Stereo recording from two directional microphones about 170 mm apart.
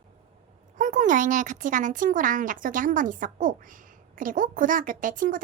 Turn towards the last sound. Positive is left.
turn(degrees=-55)  # may be behind; listen again after turning